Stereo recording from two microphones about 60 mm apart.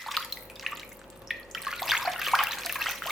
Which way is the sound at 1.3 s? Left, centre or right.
Centre.